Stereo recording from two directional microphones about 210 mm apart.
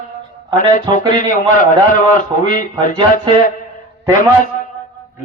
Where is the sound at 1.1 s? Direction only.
40° left (ahead or behind).